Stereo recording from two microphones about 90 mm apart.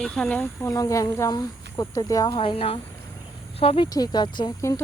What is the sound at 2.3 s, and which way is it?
Speech, 70° left (ahead or behind).